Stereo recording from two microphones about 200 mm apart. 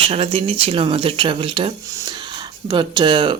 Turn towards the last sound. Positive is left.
turn(degrees=-25)  # may be behind; listen again after turning